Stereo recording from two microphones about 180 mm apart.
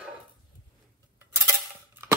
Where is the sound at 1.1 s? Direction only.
10° right (ahead or behind).